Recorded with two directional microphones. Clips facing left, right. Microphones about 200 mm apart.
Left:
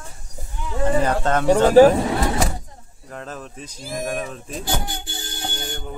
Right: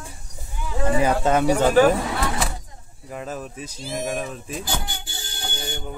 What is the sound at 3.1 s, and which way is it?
Speech, 10° right (ahead or behind).